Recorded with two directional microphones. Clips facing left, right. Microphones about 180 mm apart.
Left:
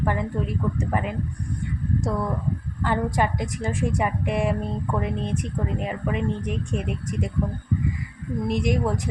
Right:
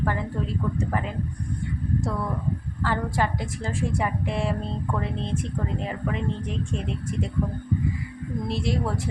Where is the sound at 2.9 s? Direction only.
15° left (ahead or behind).